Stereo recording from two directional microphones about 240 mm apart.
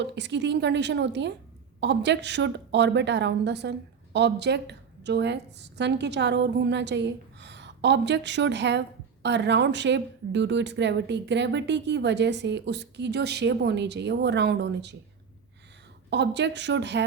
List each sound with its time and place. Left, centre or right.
0.0 s speech: right
16.0 s speech: right